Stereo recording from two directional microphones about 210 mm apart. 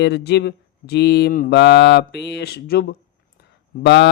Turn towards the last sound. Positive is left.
turn(degrees=55)  # may be behind; listen again after turning